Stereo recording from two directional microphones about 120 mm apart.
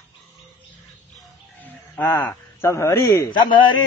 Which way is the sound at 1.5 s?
15° left (ahead or behind).